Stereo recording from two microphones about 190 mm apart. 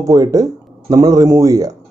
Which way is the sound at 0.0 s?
20° right (ahead or behind).